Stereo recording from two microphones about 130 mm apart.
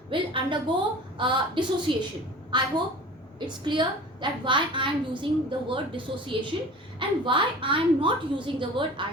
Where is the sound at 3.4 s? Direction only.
35° right (ahead or behind).